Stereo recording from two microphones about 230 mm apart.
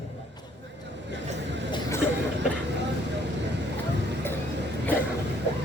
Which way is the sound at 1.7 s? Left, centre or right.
Centre.